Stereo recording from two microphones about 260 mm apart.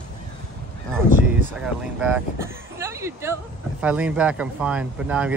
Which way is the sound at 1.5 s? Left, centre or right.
Centre.